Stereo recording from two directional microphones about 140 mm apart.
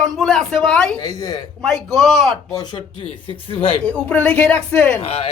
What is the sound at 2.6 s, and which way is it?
Speech, 30° left (ahead or behind).